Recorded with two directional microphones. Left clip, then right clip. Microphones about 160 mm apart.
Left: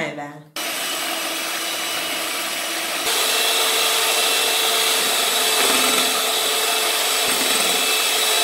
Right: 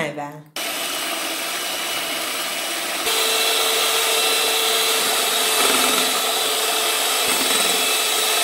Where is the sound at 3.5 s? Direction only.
10° right (ahead or behind).